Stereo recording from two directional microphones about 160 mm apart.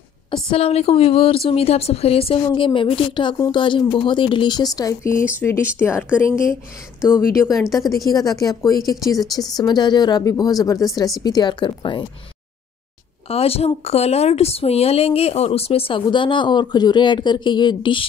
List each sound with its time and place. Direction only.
0.3 s a woman's voice: 35° left (ahead or behind)
13.3 s a woman's voice: 40° left (ahead or behind)